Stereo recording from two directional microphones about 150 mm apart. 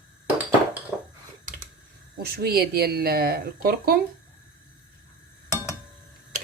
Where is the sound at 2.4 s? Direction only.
90° right.